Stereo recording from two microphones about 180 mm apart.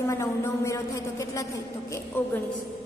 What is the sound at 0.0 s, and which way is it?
Speech, 15° left (ahead or behind).